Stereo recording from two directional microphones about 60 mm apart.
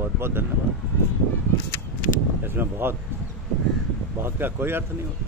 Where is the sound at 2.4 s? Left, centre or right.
Right.